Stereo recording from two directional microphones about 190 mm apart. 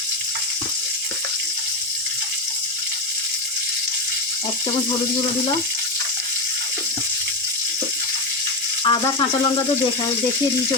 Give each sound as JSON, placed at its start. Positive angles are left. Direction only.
{"t": 8.8, "sound": "rattle", "side_deg": 25}